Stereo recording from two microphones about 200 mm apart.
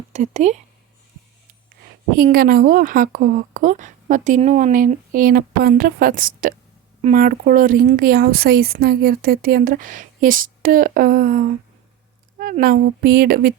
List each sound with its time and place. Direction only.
0.1 s speech: 35° right (ahead or behind)
2.1 s a woman's voice: 45° right (ahead or behind)